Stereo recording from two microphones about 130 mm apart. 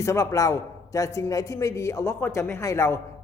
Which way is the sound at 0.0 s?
25° left (ahead or behind).